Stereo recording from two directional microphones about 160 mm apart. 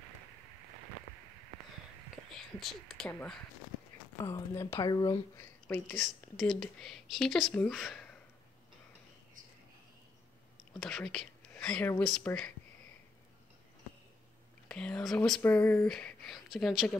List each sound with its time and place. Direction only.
2.3 s speech: centre (ahead or behind); by 5.5 s 20° left (ahead or behind)
5.7 s speech: 5° left (ahead or behind)
10.8 s speech: 5° left (ahead or behind)
14.7 s speech: 5° left (ahead or behind)